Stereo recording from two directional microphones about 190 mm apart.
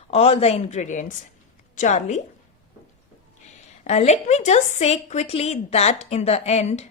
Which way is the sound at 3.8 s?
35° left (ahead or behind).